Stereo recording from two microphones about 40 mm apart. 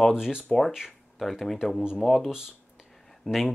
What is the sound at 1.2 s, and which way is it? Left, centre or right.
Speech, centre.